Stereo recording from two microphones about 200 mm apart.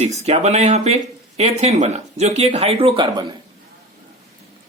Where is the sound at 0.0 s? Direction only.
30° right (ahead or behind).